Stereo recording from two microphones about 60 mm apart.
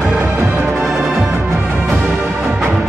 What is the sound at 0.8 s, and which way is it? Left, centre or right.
Music, centre.